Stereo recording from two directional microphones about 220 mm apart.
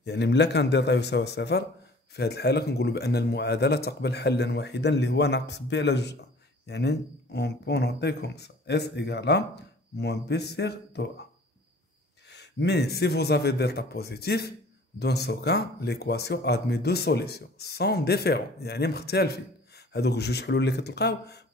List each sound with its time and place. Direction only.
0.0 s speech: 50° left (ahead or behind)
12.3 s speech: 50° left (ahead or behind)